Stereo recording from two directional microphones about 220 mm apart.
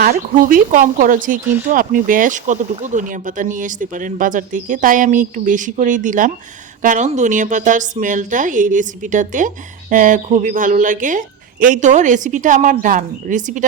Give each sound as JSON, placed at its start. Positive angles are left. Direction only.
{"t": 0.0, "sound": "speech", "side_deg": -40}